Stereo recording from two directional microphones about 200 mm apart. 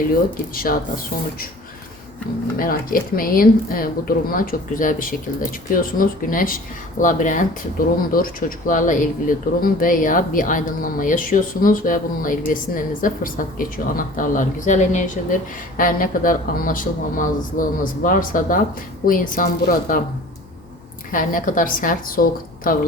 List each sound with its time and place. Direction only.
0.5 s a woman's voice: 45° left (ahead or behind)
2.6 s a woman's voice: 45° left (ahead or behind)
21.1 s speech: 40° left (ahead or behind)